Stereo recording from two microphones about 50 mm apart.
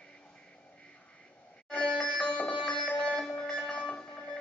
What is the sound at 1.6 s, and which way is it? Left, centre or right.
Sitar, centre.